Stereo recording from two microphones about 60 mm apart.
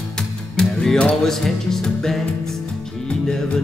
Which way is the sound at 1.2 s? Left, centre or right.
Centre.